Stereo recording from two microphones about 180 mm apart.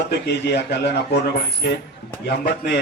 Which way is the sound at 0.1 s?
70° left (ahead or behind).